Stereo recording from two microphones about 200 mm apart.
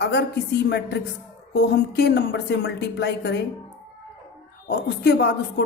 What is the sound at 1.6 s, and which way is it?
Speech, 55° left (ahead or behind).